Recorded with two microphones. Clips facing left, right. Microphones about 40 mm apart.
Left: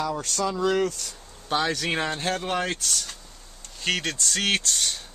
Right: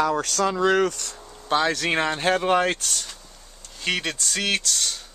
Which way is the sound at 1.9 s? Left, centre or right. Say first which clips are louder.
Right 5 dB; right.